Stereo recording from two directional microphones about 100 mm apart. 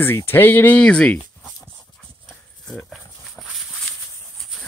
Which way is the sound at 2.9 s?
Centre (ahead or behind).